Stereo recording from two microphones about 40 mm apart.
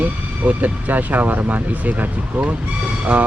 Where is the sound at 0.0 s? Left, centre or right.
Right.